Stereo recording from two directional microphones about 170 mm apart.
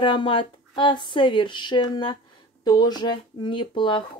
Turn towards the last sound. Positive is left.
turn(degrees=30)  # may be behind; listen again after turning